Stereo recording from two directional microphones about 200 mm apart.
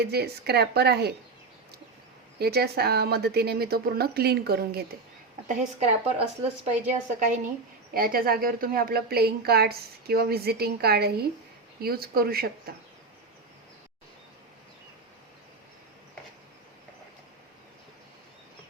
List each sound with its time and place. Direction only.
0.0 s a woman's voice: 55° right (ahead or behind)
2.4 s a woman's voice: 50° right (ahead or behind)
5.5 s a woman's voice: 35° right (ahead or behind); by 12.7 s 50° right (ahead or behind)